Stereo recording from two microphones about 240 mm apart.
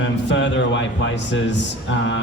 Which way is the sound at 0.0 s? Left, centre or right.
Left.